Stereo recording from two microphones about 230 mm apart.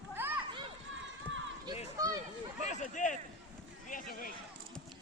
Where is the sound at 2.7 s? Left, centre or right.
Left.